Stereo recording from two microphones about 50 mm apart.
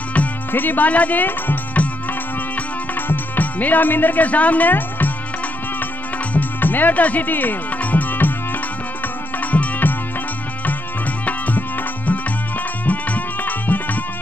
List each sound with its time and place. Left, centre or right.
0.5 s speech: left
2.5 s music: left
6.3 s music: left
9.4 s music: left
11.2 s music: left
12.8 s music: left